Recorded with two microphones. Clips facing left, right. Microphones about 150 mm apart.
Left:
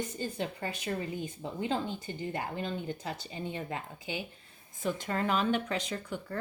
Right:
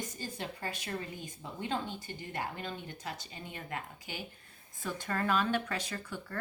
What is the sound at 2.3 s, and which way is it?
Speech, 25° left (ahead or behind).